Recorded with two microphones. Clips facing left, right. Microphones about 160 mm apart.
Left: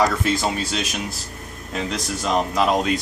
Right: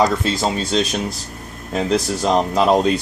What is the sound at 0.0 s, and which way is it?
Speech, 25° right (ahead or behind).